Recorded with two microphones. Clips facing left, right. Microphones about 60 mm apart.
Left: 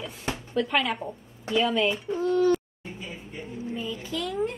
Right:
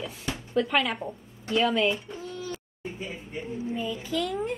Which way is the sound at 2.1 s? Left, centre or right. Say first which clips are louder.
Left 14 dB; left.